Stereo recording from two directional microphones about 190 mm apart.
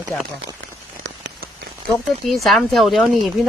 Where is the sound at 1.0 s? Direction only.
70° right (ahead or behind).